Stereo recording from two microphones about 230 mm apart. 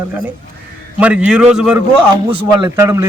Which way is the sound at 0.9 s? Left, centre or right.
Centre.